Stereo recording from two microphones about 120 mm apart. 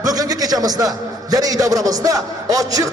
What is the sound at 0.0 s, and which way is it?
A man's voice, 30° right (ahead or behind).